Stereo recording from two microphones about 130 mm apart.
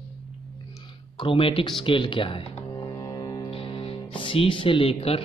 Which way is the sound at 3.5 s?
45° left (ahead or behind).